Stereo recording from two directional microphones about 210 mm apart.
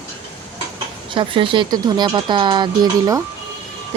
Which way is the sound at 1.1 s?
25° right (ahead or behind).